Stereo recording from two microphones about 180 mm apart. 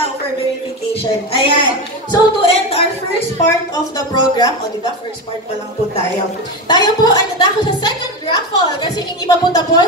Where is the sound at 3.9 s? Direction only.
20° left (ahead or behind).